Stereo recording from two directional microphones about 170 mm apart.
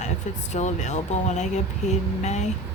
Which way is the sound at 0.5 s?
45° left (ahead or behind).